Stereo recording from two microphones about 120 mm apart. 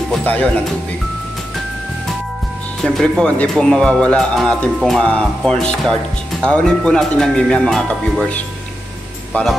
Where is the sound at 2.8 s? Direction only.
5° left (ahead or behind).